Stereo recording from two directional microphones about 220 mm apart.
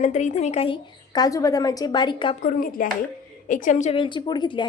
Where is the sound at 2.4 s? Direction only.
40° left (ahead or behind).